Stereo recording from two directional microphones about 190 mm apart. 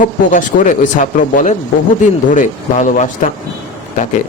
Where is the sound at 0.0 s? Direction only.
45° left (ahead or behind).